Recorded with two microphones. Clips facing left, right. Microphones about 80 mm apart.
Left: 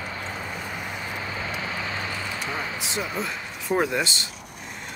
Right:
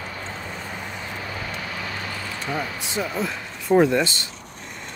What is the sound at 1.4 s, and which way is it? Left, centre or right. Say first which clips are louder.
Vehicle: left 1 dB; left.